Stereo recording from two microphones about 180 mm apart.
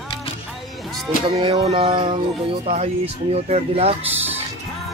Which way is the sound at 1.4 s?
30° right (ahead or behind).